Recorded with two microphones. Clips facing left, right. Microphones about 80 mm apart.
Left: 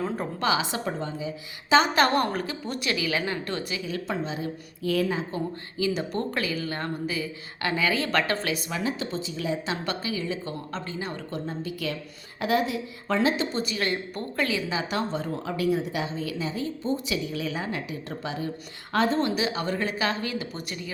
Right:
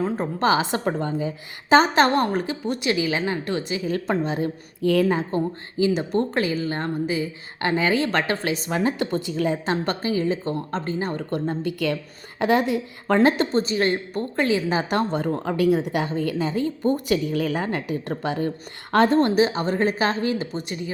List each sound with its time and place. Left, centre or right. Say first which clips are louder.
0.0 s a woman's voice: right 5 dB; right
0.4 s a woman's voice: right 6 dB; right
1.9 s a woman's voice: right 4 dB; right
3.8 s a woman's voice: right 6 dB; right
5.7 s a woman's voice: right 6 dB; right
8.7 s a woman's voice: right 6 dB; right
11.3 s a woman's voice: right 7 dB; right
13.5 s a woman's voice: right 7 dB; right
14.7 s a woman's voice: right 6 dB; right
19.4 s a woman's voice: right 7 dB; right